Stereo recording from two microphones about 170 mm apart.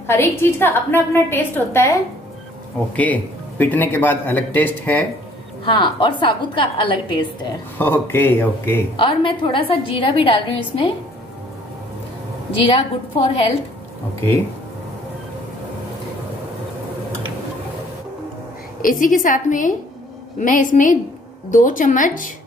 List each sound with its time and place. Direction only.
0.0 s a man's voice: 15° left (ahead or behind)
3.0 s a man's voice: 10° left (ahead or behind)
5.7 s a woman's voice: 30° left (ahead or behind)
7.7 s a man's voice: 10° left (ahead or behind)
8.9 s a woman's voice: 30° left (ahead or behind)
12.6 s a woman's voice: 35° left (ahead or behind)
18.8 s a woman's voice: 55° left (ahead or behind)